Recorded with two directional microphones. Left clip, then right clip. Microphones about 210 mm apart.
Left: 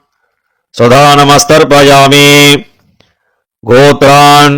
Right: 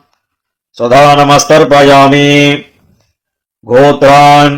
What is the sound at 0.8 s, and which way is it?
A man's voice, 40° left (ahead or behind).